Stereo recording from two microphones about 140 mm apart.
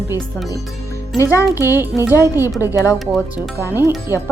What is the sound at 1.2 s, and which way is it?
Speech, 20° left (ahead or behind).